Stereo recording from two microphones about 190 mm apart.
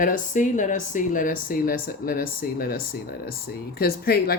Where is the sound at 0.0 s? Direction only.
45° left (ahead or behind).